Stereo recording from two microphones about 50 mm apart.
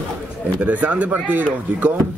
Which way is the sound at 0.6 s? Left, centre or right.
Right.